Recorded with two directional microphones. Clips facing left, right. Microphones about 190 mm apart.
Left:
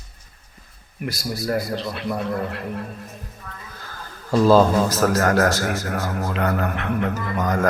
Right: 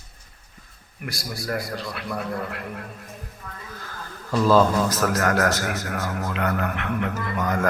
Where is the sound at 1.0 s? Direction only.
25° left (ahead or behind).